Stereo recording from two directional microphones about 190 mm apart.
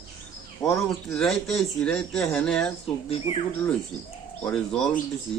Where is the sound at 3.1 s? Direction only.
30° left (ahead or behind).